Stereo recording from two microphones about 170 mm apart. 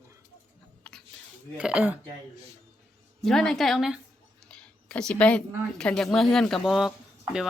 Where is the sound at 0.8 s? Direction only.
5° left (ahead or behind).